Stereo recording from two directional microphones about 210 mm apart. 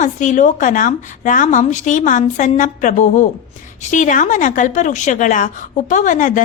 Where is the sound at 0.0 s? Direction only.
35° left (ahead or behind).